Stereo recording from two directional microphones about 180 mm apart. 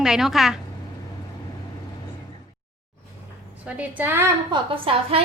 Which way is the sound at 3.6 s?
5° right (ahead or behind).